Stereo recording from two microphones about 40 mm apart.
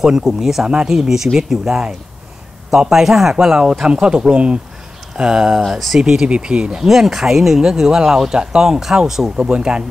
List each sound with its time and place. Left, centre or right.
0.0 s speech: centre
5.7 s speech: centre
6.2 s speech: right
6.8 s speech: centre
9.4 s speech: right